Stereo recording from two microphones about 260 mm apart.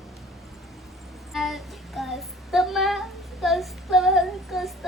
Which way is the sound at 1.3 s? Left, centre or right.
Centre.